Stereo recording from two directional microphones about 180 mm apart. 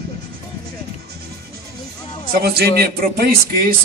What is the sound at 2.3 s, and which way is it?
A man's voice, 60° right (ahead or behind).